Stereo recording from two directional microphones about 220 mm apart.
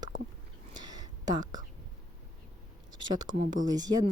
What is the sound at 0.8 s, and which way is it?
Whispering, 20° right (ahead or behind).